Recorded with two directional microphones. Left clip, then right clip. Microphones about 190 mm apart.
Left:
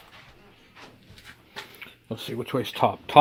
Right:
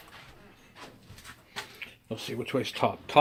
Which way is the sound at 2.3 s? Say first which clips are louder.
Left 2 dB; 40° left (ahead or behind).